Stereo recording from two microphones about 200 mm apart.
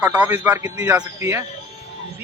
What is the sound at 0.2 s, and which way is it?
Speech, 10° right (ahead or behind).